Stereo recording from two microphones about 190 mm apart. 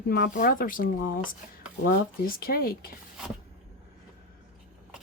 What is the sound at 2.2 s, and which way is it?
Speech, 50° left (ahead or behind).